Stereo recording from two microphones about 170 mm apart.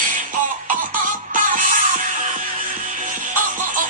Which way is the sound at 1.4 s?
50° right (ahead or behind).